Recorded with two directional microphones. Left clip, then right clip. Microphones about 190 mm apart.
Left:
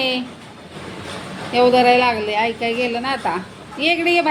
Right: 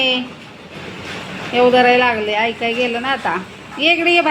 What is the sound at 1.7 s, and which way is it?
Speech, 40° right (ahead or behind).